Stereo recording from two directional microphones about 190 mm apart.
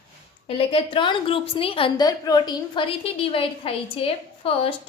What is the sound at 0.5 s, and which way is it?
A woman's voice, 30° left (ahead or behind).